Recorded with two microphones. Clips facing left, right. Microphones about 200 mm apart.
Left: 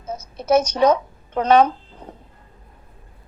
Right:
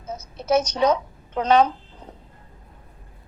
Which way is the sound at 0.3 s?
55° left (ahead or behind).